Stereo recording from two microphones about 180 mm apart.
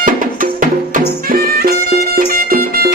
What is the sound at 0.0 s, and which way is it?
Music, 50° right (ahead or behind).